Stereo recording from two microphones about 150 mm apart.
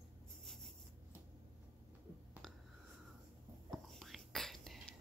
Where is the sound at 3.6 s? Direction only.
Centre (ahead or behind).